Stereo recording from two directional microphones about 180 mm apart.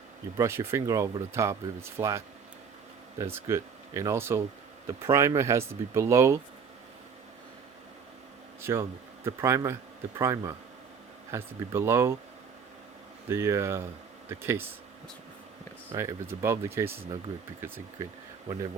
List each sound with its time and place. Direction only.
0.3 s speech: 15° right (ahead or behind)
8.6 s speech: 15° right (ahead or behind)
13.2 s speech: 15° right (ahead or behind)
15.9 s speech: 20° right (ahead or behind)